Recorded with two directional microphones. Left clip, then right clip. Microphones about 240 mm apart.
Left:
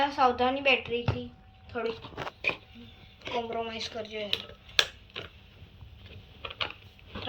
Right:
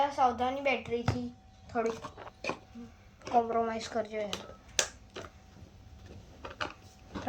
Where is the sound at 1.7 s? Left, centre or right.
Right.